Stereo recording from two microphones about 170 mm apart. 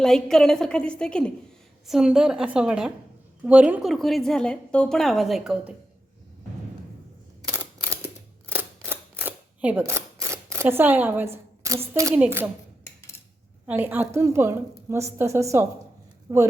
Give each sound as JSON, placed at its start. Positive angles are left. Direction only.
{"t": 0.0, "sound": "a woman's voice", "side_deg": 5}
{"t": 7.4, "sound": "scissors", "side_deg": -20}
{"t": 11.9, "sound": "a woman's voice", "side_deg": -15}
{"t": 12.8, "sound": "a sound", "side_deg": 15}
{"t": 13.7, "sound": "a woman's voice", "side_deg": -10}